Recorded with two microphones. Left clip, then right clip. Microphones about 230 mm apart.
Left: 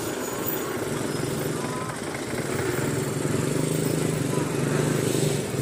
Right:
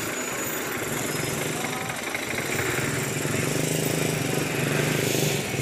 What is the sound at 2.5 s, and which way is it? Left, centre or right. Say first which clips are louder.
Vehicle: even; left.